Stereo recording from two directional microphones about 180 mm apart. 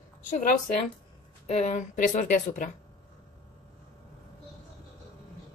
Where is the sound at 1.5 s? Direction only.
40° left (ahead or behind).